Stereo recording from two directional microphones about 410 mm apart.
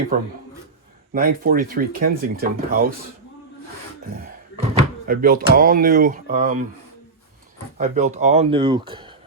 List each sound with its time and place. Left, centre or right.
0.1 s speech: centre
4.0 s speech: right
7.8 s speech: centre